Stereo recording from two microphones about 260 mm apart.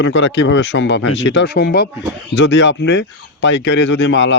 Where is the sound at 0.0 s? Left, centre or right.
Left.